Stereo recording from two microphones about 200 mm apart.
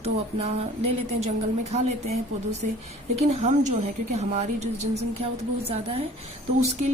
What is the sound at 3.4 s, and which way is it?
A woman's voice, 35° right (ahead or behind).